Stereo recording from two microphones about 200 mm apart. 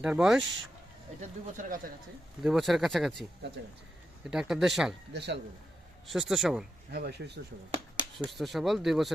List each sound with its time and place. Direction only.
0.0 s speech: 5° right (ahead or behind)
1.2 s speech: 40° right (ahead or behind)
2.4 s speech: centre (ahead or behind)
4.3 s speech: 5° right (ahead or behind)
5.1 s speech: 60° right (ahead or behind)
6.1 s speech: centre (ahead or behind)
6.9 s speech: 55° right (ahead or behind)
8.3 s speech: centre (ahead or behind)